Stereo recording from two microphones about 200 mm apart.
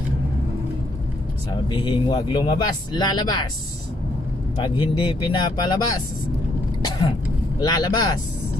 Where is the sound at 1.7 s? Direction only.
25° left (ahead or behind).